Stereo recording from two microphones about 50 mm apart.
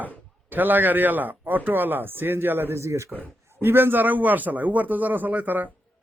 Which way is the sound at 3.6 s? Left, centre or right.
Right.